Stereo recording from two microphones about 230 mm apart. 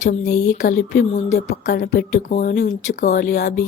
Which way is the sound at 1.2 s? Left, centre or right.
Left.